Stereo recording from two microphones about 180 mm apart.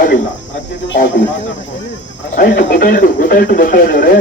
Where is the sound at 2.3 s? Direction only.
45° left (ahead or behind).